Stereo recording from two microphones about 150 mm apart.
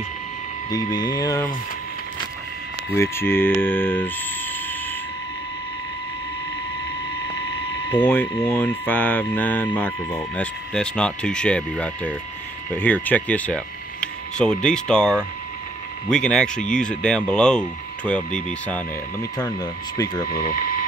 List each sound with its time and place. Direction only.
0.7 s speech: 25° left (ahead or behind)
2.9 s speech: 15° left (ahead or behind)
8.0 s speech: 15° left (ahead or behind)
19.6 s speech: 25° left (ahead or behind)
20.3 s speech: 75° left (ahead or behind)